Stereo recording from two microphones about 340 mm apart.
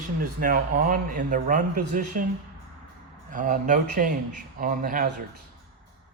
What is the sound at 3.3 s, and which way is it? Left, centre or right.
Speech, right.